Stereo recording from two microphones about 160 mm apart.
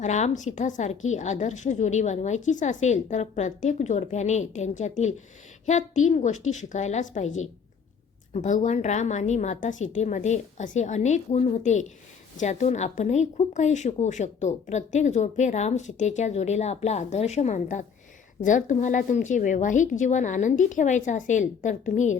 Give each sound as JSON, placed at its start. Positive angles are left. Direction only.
{"t": 0.0, "sound": "a woman's voice", "side_deg": 50}